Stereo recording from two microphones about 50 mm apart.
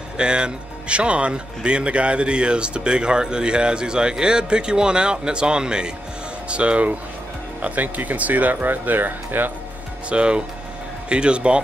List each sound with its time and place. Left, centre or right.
0.2 s speech: centre; by 9.5 s right
10.0 s speech: right